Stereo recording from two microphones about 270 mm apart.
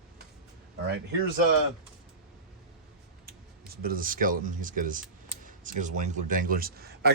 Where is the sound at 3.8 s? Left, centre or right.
Right.